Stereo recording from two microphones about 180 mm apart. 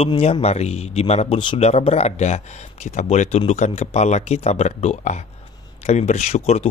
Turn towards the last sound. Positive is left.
turn(degrees=40)  # may be behind; listen again after turning